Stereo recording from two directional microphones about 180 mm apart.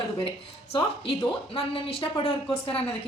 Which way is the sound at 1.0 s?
30° left (ahead or behind).